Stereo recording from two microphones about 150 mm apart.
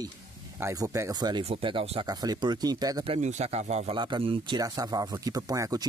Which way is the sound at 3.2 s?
50° right (ahead or behind).